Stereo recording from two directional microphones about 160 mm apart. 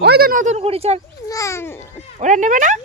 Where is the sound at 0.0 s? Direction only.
75° right (ahead or behind); by 1.0 s 40° right (ahead or behind).